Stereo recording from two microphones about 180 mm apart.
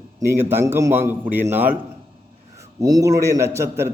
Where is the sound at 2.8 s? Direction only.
20° right (ahead or behind).